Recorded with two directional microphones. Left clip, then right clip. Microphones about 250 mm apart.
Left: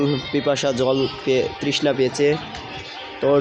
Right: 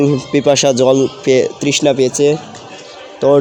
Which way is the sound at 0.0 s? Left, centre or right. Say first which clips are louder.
Right 8 dB; right.